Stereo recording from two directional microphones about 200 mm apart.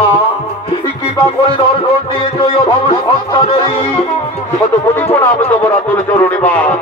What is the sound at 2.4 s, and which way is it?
Music, 20° left (ahead or behind).